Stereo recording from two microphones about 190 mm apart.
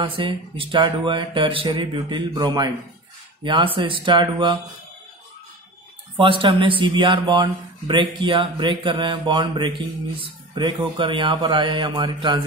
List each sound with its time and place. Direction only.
0.0 s speech: 25° right (ahead or behind)
6.1 s speech: 25° right (ahead or behind)
10.2 s a sound: 25° right (ahead or behind)
11.0 s speech: 25° right (ahead or behind)